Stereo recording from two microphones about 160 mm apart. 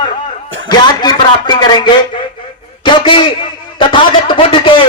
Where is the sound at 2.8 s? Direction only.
30° left (ahead or behind).